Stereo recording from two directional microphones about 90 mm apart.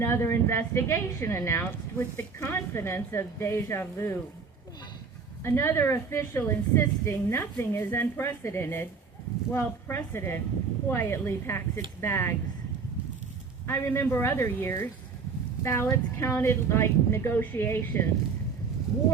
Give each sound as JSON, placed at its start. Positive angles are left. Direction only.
{"t": 0.0, "sound": "a woman's voice", "side_deg": 30}
{"t": 5.4, "sound": "a woman's voice", "side_deg": 30}
{"t": 13.7, "sound": "a woman's voice", "side_deg": 25}